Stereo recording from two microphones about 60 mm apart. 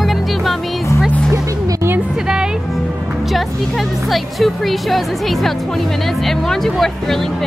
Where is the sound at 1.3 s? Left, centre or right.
Right.